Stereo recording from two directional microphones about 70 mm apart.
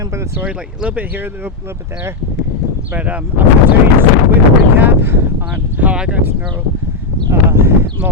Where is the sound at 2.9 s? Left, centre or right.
Right.